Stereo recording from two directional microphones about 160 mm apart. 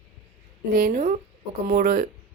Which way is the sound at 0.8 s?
55° right (ahead or behind).